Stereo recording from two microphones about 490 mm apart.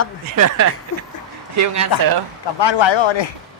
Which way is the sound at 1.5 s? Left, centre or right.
Right.